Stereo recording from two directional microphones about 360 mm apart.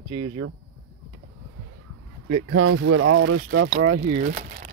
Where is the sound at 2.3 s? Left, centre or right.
Right.